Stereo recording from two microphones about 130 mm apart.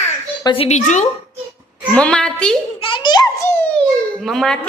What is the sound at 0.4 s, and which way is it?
Speech, 45° left (ahead or behind).